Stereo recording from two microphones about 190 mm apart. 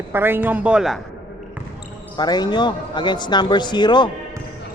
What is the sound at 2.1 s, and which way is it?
Speech, 20° left (ahead or behind).